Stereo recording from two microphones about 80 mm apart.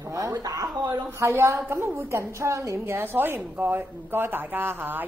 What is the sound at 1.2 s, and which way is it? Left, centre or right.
A woman's voice, right.